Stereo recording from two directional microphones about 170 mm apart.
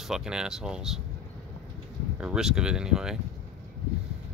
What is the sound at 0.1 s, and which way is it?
Speech, 5° right (ahead or behind).